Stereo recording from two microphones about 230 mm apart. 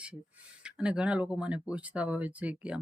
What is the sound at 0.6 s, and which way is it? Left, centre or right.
Speech, centre.